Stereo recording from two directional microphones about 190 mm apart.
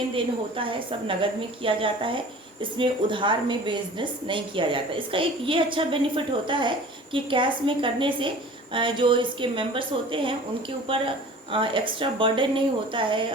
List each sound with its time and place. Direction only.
0.1 s a woman's voice: 30° right (ahead or behind)